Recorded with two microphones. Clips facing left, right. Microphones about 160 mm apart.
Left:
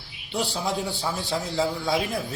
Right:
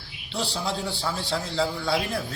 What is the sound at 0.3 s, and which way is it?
A man's voice, 20° left (ahead or behind).